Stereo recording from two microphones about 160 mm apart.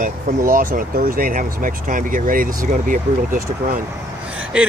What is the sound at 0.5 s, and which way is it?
Speech, 60° right (ahead or behind).